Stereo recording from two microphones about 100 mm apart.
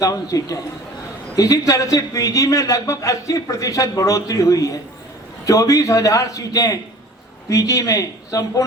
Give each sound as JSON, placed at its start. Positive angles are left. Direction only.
{"t": 0.0, "sound": "a man's voice", "side_deg": 35}